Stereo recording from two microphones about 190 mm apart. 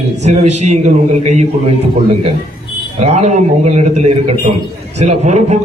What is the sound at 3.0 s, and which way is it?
A man's voice, 35° right (ahead or behind).